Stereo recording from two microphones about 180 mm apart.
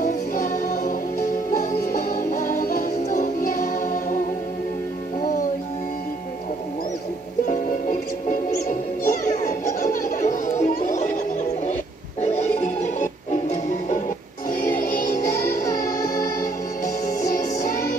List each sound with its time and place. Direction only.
0.0 s music: 50° left (ahead or behind)
7.4 s music: 45° left (ahead or behind)
9.0 s children playing: 45° left (ahead or behind)
12.2 s music: 40° left (ahead or behind)
17.3 s music: 50° left (ahead or behind)